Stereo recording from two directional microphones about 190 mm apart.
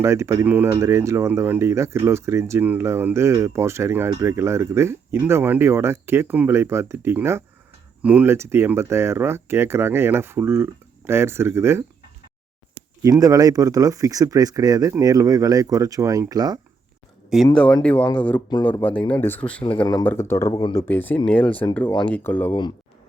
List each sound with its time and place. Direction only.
0.0 s speech: 15° right (ahead or behind)
13.0 s speech: 20° right (ahead or behind)
17.2 s speech: centre (ahead or behind)
19.6 s speech: 25° left (ahead or behind)
20.8 s speech: 10° left (ahead or behind)